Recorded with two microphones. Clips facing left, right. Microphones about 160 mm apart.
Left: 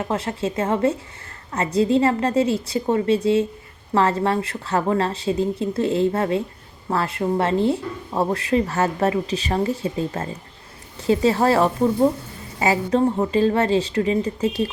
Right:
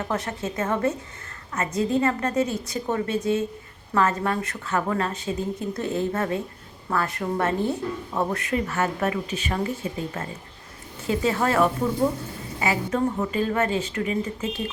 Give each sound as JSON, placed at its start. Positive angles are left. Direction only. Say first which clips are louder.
{"t": 0.0, "sound": "a woman's voice", "louder": "left 4 dB", "side_deg": 25}